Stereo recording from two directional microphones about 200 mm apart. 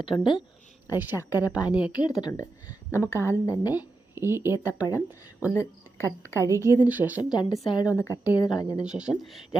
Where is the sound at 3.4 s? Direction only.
20° left (ahead or behind).